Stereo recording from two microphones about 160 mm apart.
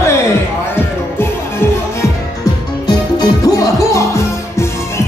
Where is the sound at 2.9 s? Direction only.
25° left (ahead or behind).